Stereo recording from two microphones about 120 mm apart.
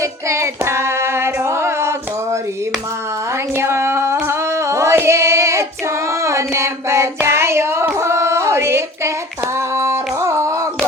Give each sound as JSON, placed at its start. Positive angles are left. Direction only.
{"t": 0.0, "sound": "female singing", "side_deg": -25}
{"t": 3.5, "sound": "singing", "side_deg": -20}
{"t": 6.1, "sound": "child singing", "side_deg": -25}
{"t": 9.6, "sound": "singing", "side_deg": -20}